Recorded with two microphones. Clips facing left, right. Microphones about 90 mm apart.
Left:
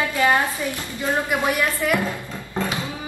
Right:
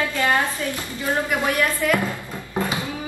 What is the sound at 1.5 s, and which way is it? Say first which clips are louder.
Speech: right 1 dB; 15° left (ahead or behind).